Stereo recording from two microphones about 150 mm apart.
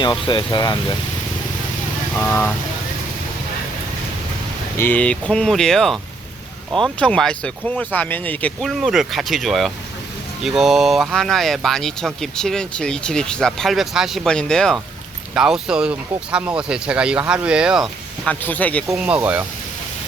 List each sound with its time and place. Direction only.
0.0 s speech: 30° left (ahead or behind)
2.1 s speech: 15° left (ahead or behind)
4.8 s speech: 10° left (ahead or behind); by 17.8 s 5° right (ahead or behind)
18.3 s speech: 10° left (ahead or behind)
18.9 s speech: 5° right (ahead or behind)